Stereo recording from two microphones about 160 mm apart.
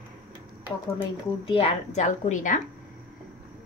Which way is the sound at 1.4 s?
35° left (ahead or behind).